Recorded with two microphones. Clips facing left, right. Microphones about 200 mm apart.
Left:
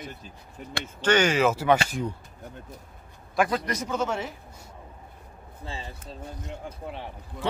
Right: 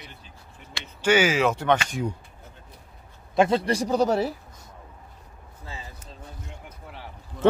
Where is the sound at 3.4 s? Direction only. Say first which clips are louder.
Right 5 dB; 25° right (ahead or behind).